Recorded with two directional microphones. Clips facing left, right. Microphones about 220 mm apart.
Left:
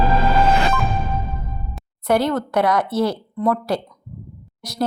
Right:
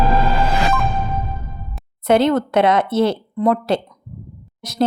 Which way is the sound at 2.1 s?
20° right (ahead or behind).